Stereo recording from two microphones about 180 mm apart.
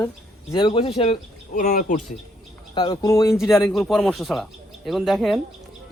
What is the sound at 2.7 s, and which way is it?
Speech, 25° left (ahead or behind).